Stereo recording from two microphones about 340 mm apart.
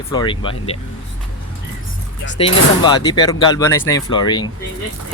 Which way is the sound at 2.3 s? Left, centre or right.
Centre.